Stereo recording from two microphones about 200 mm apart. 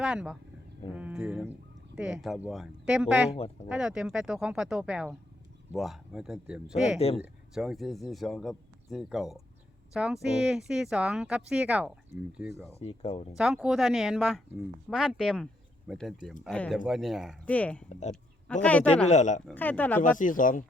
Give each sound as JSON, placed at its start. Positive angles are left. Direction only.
{"t": 0.0, "sound": "speech", "side_deg": -5}
{"t": 12.8, "sound": "speech", "side_deg": 30}
{"t": 13.3, "sound": "speech", "side_deg": -5}
{"t": 19.0, "sound": "speech", "side_deg": 35}
{"t": 19.5, "sound": "speech", "side_deg": 10}
{"t": 20.0, "sound": "speech", "side_deg": 40}